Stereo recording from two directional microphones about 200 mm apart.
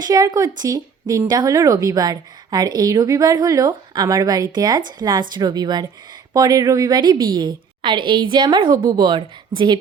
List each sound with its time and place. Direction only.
0.0 s a woman's voice: 20° right (ahead or behind)